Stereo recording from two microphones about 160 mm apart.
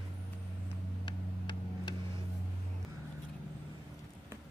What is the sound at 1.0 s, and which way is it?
Vehicle, 30° left (ahead or behind).